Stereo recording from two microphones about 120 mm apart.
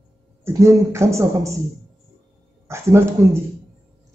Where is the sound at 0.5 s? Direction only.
25° right (ahead or behind).